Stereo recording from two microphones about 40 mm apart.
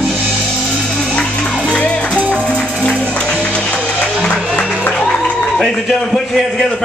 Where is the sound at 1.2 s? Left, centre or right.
Left.